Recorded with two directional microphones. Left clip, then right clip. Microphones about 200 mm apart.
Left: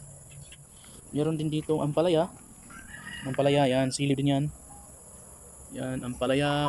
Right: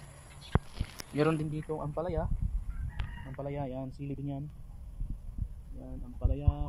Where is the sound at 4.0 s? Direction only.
60° left (ahead or behind).